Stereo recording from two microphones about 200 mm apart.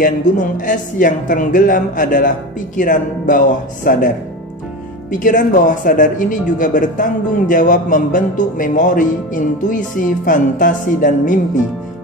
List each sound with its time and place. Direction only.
0.0 s speech: 40° left (ahead or behind)
5.1 s speech: 40° left (ahead or behind)